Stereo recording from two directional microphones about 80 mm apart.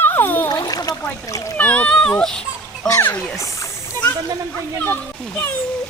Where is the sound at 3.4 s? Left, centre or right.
Left.